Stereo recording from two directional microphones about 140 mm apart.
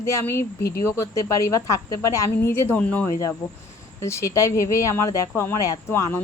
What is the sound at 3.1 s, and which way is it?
Speech, 25° left (ahead or behind).